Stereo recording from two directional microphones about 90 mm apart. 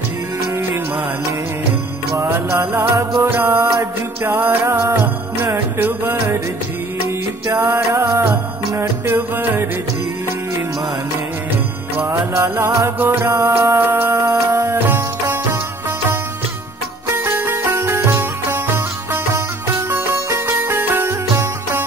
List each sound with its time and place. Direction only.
2.1 s music: 30° right (ahead or behind)
7.5 s music: 30° right (ahead or behind)
12.1 s music: 30° right (ahead or behind)
17.2 s music: 20° right (ahead or behind)
19.7 s music: 30° right (ahead or behind)